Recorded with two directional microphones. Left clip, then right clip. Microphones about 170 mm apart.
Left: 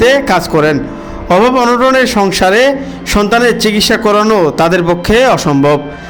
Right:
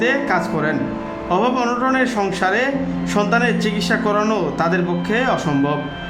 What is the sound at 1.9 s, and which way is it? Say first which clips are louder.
A man's voice: left 9 dB; 45° left (ahead or behind).